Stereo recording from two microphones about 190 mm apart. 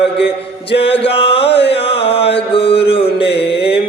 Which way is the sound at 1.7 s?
30° left (ahead or behind).